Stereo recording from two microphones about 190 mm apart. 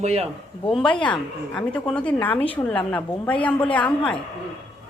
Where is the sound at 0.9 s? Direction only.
25° left (ahead or behind).